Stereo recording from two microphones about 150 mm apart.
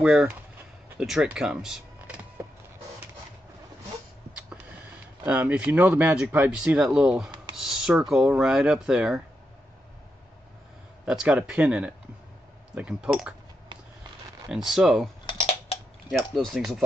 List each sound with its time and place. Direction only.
0.0 s speech: 5° right (ahead or behind)
2.4 s a sound: 15° right (ahead or behind)
5.2 s speech: 10° right (ahead or behind)
11.1 s speech: 5° right (ahead or behind)
14.5 s speech: 5° right (ahead or behind)
15.2 s computer keyboard: 35° left (ahead or behind)
16.1 s speech: centre (ahead or behind)